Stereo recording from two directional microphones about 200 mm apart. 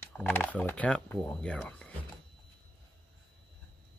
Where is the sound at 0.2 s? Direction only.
5° left (ahead or behind).